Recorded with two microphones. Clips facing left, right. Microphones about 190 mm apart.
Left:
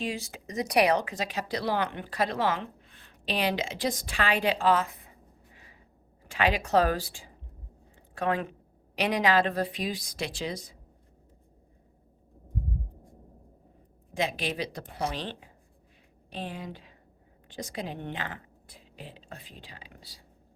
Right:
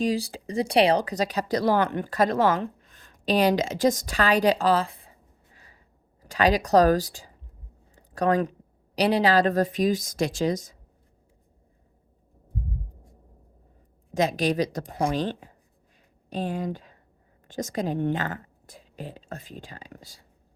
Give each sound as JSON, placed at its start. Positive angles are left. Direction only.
{"t": 0.0, "sound": "speech", "side_deg": -35}
{"t": 6.2, "sound": "speech", "side_deg": -40}
{"t": 7.9, "sound": "a sound", "side_deg": -40}
{"t": 9.0, "sound": "speech", "side_deg": -35}
{"t": 14.1, "sound": "speech", "side_deg": -40}